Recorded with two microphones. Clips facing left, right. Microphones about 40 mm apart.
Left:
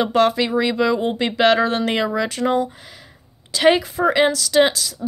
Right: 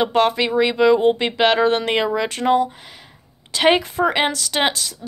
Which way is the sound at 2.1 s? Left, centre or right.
Right.